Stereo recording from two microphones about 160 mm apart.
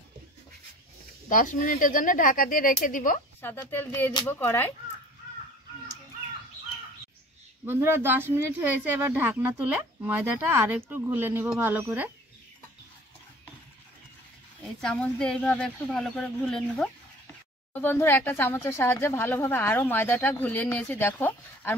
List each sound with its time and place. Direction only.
1.3 s speech: 55° left (ahead or behind)
3.7 s speech: 15° left (ahead or behind)
7.6 s speech: 15° right (ahead or behind)
14.6 s speech: 5° left (ahead or behind)